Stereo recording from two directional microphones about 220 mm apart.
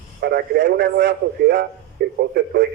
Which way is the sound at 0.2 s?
45° right (ahead or behind).